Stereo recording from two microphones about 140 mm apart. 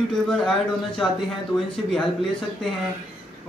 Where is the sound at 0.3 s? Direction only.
Centre (ahead or behind).